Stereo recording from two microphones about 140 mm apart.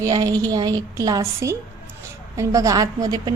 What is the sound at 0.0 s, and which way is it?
A woman's voice, 25° right (ahead or behind).